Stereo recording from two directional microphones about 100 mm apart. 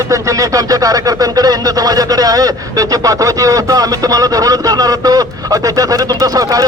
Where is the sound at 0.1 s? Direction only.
35° right (ahead or behind).